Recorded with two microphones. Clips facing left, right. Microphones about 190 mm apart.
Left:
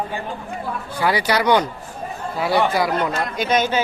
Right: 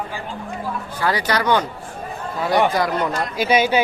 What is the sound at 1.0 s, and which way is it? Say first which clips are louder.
Speech: left 2 dB; 10° left (ahead or behind).